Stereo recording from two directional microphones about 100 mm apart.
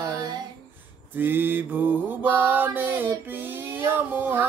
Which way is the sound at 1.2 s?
20° right (ahead or behind).